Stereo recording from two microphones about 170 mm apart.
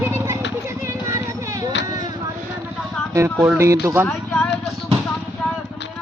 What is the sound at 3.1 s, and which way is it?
Speech, 15° right (ahead or behind).